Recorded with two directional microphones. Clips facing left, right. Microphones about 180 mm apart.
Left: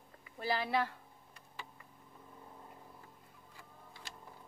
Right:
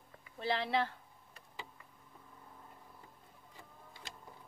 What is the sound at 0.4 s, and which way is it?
Speech, 25° right (ahead or behind).